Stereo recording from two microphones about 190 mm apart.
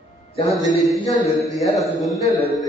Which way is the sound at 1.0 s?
20° left (ahead or behind).